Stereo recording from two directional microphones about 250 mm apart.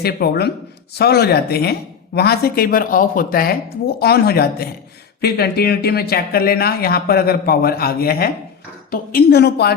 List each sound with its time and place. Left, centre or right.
0.0 s speech: left